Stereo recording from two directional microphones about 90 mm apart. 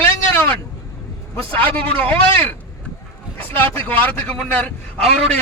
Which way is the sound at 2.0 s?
20° left (ahead or behind).